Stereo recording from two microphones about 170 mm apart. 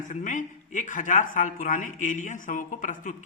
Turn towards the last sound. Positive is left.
turn(degrees=50)  # may be behind; listen again after turning